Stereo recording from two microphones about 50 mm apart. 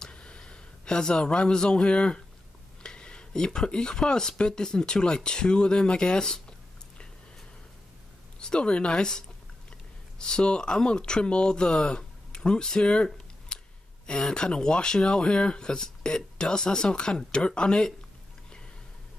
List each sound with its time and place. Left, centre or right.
0.0 s a sound: centre
2.8 s speech: centre
8.4 s speech: centre